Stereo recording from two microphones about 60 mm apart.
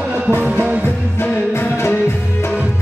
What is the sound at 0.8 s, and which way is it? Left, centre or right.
Music, left.